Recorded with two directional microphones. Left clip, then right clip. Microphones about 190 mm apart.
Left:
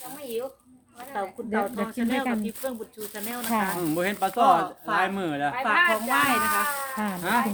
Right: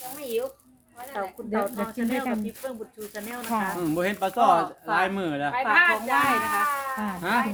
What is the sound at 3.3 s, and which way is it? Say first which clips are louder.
Speech: left 1 dB; 50° left (ahead or behind).